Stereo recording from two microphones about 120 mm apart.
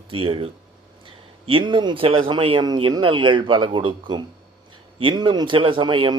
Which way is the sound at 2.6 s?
35° right (ahead or behind).